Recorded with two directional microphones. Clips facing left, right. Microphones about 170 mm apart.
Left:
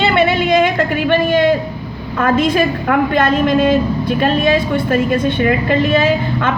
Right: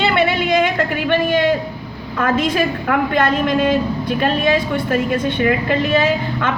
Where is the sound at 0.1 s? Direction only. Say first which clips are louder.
Left 3 dB; 30° left (ahead or behind).